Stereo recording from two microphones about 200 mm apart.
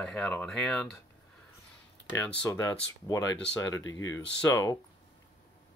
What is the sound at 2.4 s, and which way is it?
Speech, 15° left (ahead or behind).